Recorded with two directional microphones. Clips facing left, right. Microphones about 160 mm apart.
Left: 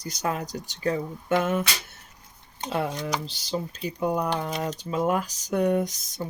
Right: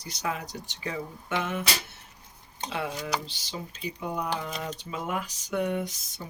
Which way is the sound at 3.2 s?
40° left (ahead or behind).